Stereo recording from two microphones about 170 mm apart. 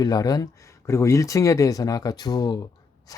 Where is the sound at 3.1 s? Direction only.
20° left (ahead or behind).